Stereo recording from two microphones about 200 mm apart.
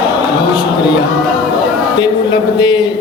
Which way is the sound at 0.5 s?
20° left (ahead or behind).